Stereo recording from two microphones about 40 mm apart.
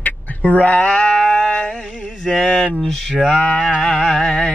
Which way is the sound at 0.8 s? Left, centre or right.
Centre.